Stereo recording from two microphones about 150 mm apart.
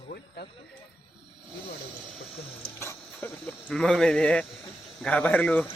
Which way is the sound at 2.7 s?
15° left (ahead or behind).